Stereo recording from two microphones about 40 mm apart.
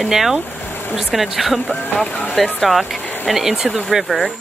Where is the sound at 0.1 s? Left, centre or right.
Centre.